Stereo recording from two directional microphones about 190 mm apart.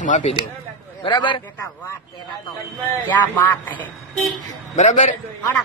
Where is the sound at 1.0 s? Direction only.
25° left (ahead or behind).